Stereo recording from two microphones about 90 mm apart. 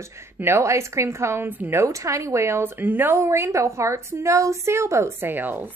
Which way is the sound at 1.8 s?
35° right (ahead or behind).